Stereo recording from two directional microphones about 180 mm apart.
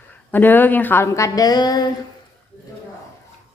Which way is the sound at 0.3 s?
10° left (ahead or behind).